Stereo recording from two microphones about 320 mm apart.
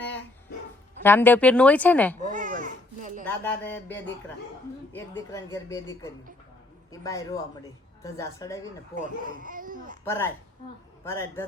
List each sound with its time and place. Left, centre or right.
1.0 s speech: centre
2.2 s a sound: right
3.2 s speech: centre
6.9 s speech: centre
9.0 s speech: right
10.0 s speech: centre